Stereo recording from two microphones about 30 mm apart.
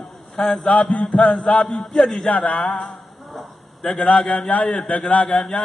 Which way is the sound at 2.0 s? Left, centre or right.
Centre.